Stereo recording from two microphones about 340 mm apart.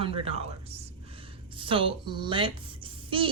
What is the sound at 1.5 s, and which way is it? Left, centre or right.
A woman's voice, centre.